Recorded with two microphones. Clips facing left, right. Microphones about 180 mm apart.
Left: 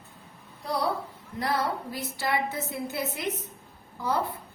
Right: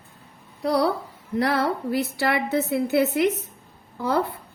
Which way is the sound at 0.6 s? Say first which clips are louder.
Right 7 dB; 75° right (ahead or behind).